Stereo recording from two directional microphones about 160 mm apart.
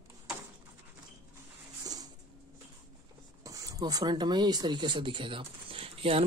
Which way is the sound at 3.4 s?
20° right (ahead or behind).